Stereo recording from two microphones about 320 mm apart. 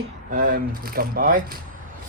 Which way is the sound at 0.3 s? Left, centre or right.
Right.